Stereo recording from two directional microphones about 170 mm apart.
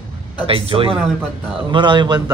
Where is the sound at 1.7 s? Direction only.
25° right (ahead or behind).